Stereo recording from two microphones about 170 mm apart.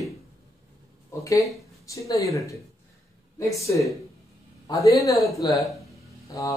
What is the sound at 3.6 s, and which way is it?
Speech, 20° left (ahead or behind).